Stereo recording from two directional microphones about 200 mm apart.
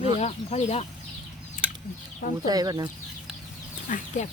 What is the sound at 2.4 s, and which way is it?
Speech, 20° right (ahead or behind).